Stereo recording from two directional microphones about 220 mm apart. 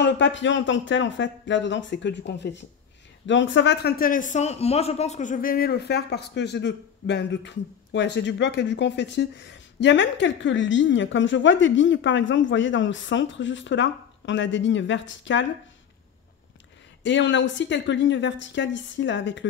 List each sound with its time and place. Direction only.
0.0 s a man's voice: 55° left (ahead or behind)
17.0 s speech: 55° left (ahead or behind)